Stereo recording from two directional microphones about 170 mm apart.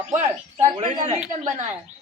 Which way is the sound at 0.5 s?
40° right (ahead or behind).